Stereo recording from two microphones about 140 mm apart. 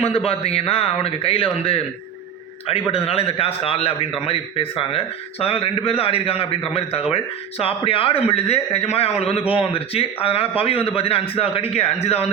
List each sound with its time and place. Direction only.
0.3 s a man's voice: 45° left (ahead or behind)
2.9 s a man's voice: 45° left (ahead or behind)